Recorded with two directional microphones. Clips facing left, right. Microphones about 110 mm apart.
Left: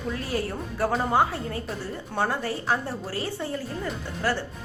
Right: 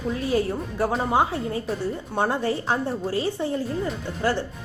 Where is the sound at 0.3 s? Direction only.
20° right (ahead or behind).